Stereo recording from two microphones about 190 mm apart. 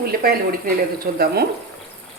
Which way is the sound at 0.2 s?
50° right (ahead or behind).